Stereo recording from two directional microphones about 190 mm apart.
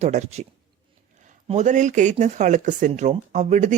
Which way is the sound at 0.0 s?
35° right (ahead or behind).